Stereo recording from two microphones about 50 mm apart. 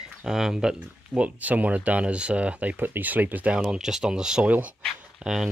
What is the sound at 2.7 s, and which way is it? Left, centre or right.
Speech, right.